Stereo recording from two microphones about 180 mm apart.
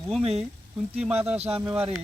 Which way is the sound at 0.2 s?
35° right (ahead or behind).